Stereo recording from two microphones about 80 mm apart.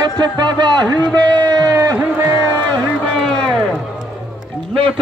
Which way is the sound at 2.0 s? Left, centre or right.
Right.